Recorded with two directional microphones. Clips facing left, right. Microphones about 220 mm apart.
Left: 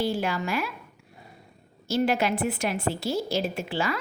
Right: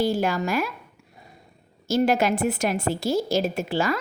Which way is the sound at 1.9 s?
45° right (ahead or behind).